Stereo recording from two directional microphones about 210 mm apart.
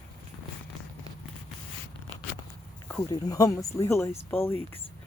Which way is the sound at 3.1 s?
15° left (ahead or behind).